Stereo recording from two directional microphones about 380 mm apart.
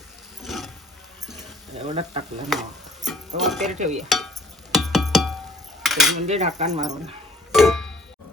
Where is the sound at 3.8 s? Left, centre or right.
Centre.